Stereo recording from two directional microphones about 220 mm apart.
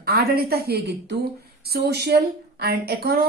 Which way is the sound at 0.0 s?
45° right (ahead or behind).